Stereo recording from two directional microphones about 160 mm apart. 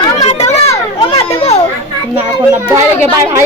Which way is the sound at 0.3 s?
40° left (ahead or behind).